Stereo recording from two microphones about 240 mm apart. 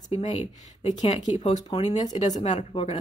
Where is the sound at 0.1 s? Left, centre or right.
Left.